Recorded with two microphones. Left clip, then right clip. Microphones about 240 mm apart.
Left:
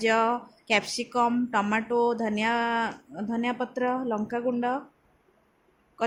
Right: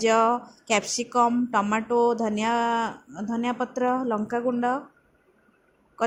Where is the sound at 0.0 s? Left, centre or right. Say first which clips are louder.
Right 3 dB; centre.